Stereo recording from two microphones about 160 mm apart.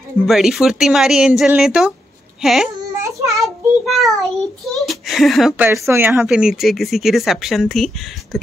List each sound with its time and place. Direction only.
0.2 s speech: centre (ahead or behind)
2.8 s a sound: 20° right (ahead or behind)
3.3 s child singing: centre (ahead or behind)
4.7 s speech: centre (ahead or behind)
5.9 s speech: 15° right (ahead or behind)